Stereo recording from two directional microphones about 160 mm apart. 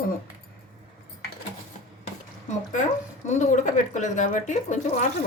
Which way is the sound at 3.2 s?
50° left (ahead or behind).